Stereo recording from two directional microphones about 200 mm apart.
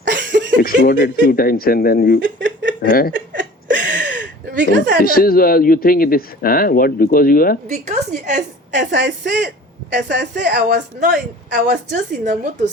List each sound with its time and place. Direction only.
0.1 s a sound: 60° right (ahead or behind)
0.6 s a man's voice: 45° left (ahead or behind)
2.2 s speech: 65° right (ahead or behind)
2.8 s a man's voice: 45° left (ahead or behind)
3.7 s a sound: 60° right (ahead or behind)
5.0 s a man's voice: 45° left (ahead or behind)
7.7 s a woman's voice: 35° right (ahead or behind)
8.8 s a woman's voice: 60° right (ahead or behind)
11.6 s a woman's voice: 40° right (ahead or behind)